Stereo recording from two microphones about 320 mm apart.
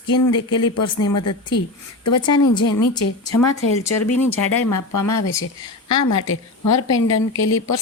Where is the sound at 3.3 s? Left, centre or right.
Left.